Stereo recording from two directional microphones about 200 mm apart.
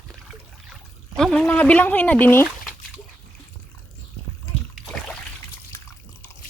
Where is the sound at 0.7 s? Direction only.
Centre (ahead or behind).